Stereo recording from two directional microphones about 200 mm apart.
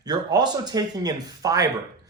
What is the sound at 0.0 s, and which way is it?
A man's voice, 20° right (ahead or behind).